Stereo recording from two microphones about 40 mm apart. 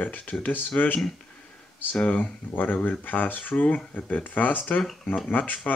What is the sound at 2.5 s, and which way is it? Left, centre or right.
Speech, left.